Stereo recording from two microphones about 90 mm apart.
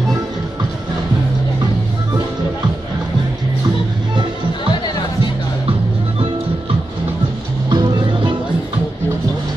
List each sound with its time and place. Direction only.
7.7 s music: 60° right (ahead or behind)